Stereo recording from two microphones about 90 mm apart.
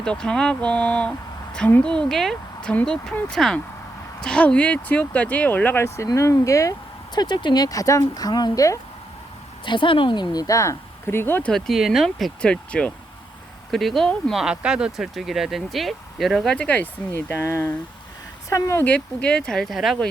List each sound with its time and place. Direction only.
0.0 s speech: 10° left (ahead or behind)
6.1 s speech: 40° left (ahead or behind)
7.2 s speech: 55° left (ahead or behind); by 8.8 s 40° left (ahead or behind)
9.6 s speech: 65° left (ahead or behind)
10.3 s speech: 40° left (ahead or behind)
11.4 s speech: 5° left (ahead or behind)
14.4 s speech: 10° right (ahead or behind)
16.6 s speech: 15° left (ahead or behind); by 18.9 s 35° left (ahead or behind)
18.9 s speech: 15° left (ahead or behind)